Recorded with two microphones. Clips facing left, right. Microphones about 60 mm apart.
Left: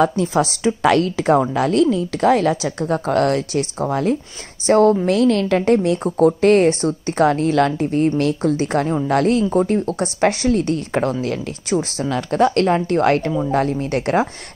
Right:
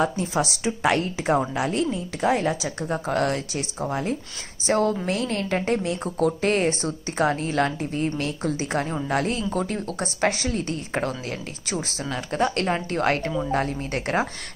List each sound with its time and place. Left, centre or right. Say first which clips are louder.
0.0 s a woman's voice: left 7 dB; left
4.6 s a woman's voice: left 9 dB; left
5.0 s a woman's voice: left 10 dB; left
9.5 s a woman's voice: left 9 dB; left